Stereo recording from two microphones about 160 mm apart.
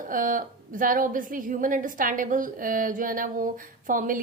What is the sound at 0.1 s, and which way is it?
A woman's voice, 55° right (ahead or behind).